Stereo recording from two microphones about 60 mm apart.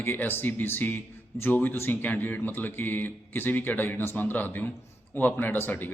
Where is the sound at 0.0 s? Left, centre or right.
Left.